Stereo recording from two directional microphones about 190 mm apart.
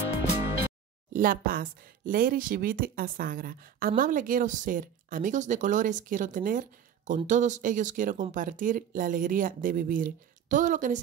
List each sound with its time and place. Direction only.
1.1 s speech: 50° right (ahead or behind)